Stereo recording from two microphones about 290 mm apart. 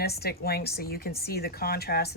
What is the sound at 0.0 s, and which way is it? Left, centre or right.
Speech, left.